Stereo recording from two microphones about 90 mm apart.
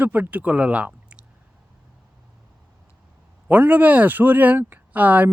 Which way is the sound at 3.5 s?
20° right (ahead or behind).